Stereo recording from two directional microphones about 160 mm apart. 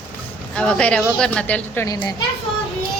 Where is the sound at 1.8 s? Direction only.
25° left (ahead or behind).